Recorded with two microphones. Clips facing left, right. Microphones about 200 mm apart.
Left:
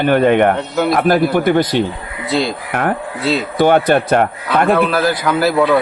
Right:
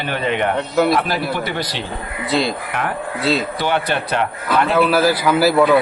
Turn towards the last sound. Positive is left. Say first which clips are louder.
# even
turn(degrees=0)  # may be behind; listen again after turning